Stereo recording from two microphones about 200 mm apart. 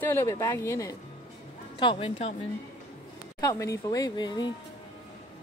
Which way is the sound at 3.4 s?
15° left (ahead or behind).